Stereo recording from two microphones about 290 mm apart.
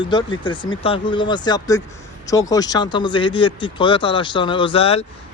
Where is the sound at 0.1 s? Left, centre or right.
Centre.